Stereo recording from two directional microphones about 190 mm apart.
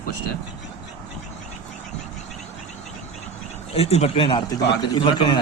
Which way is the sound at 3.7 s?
35° left (ahead or behind).